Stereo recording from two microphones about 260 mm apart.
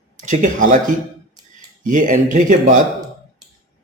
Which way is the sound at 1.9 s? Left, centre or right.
Right.